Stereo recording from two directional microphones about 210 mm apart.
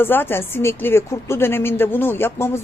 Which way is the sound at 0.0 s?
10° left (ahead or behind).